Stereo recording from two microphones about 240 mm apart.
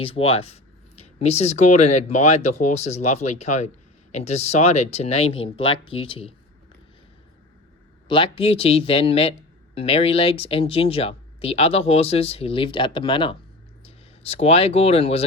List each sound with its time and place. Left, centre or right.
0.0 s speech: left
8.0 s speech: left